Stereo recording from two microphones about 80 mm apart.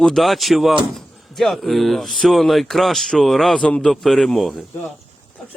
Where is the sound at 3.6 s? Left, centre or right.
Centre.